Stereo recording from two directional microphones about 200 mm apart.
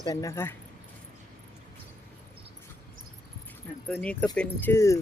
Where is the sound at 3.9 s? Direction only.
5° left (ahead or behind).